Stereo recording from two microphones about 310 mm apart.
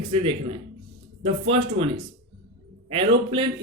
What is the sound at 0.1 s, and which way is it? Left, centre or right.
A man's voice, centre.